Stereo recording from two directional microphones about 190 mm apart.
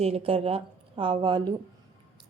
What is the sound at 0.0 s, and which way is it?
A woman's voice, 30° right (ahead or behind).